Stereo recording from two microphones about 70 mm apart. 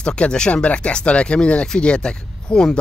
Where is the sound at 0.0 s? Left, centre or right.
Centre.